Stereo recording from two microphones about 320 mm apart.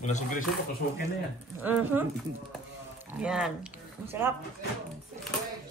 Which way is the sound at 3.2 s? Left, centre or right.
Centre.